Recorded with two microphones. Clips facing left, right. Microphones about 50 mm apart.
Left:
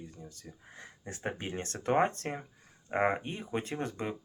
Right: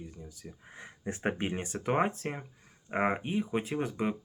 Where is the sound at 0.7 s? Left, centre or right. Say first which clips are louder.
Right 7 dB; centre.